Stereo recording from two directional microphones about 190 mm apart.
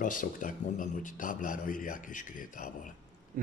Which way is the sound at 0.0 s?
45° left (ahead or behind).